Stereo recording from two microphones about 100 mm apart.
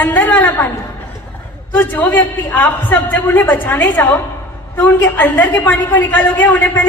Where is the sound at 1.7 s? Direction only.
20° left (ahead or behind).